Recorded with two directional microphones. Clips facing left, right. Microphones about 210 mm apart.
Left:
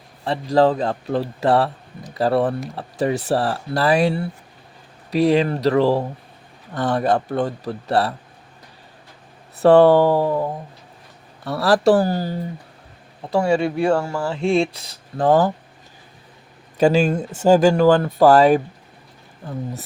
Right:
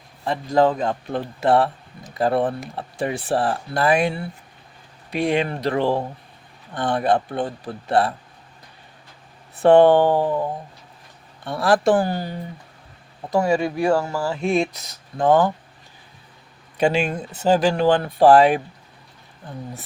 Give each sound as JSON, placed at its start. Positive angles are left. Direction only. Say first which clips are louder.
{"t": 0.3, "sound": "a man's voice", "louder": "left 2 dB", "side_deg": 35}
{"t": 9.6, "sound": "a man's voice", "louder": "left 1 dB", "side_deg": 40}
{"t": 11.4, "sound": "a man's voice", "louder": "left 2 dB", "side_deg": 35}
{"t": 13.4, "sound": "speech", "louder": "left 2 dB", "side_deg": -15}
{"t": 14.3, "sound": "speech", "louder": "left 4 dB", "side_deg": 30}
{"t": 16.7, "sound": "speech", "louder": "left 4 dB", "side_deg": 40}